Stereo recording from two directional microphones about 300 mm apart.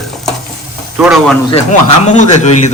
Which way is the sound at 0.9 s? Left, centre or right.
Centre.